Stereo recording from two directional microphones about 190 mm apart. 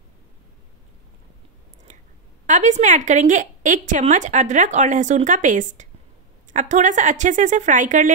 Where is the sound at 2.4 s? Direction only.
40° right (ahead or behind).